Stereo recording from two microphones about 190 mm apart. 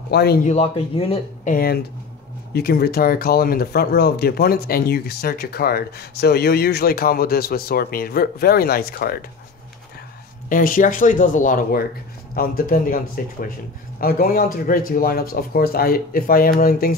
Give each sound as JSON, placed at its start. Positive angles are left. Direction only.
{"t": 0.1, "sound": "speech", "side_deg": 60}
{"t": 0.5, "sound": "speech", "side_deg": 35}
{"t": 1.5, "sound": "speech", "side_deg": 55}
{"t": 10.5, "sound": "speech", "side_deg": 45}